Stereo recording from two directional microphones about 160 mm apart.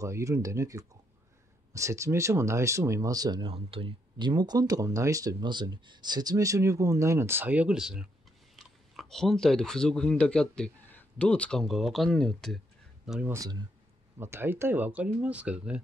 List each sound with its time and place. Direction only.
0.0 s speech: 20° right (ahead or behind); by 13.3 s 5° right (ahead or behind)
13.3 s speech: 25° right (ahead or behind); by 15.8 s 5° right (ahead or behind)